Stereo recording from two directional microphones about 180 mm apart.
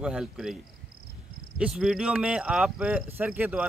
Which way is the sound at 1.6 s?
5° right (ahead or behind).